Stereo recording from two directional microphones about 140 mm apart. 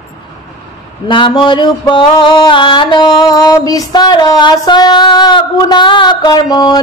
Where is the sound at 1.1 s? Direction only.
35° left (ahead or behind).